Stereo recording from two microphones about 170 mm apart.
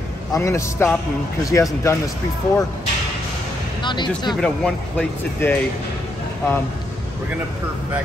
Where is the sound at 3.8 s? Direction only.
25° left (ahead or behind).